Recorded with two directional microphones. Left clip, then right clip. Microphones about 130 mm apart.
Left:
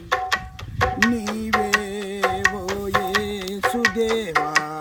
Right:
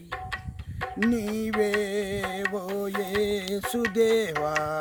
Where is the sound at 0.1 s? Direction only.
55° left (ahead or behind).